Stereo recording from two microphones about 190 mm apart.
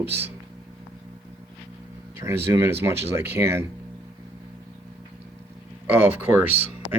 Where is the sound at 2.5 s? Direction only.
10° right (ahead or behind).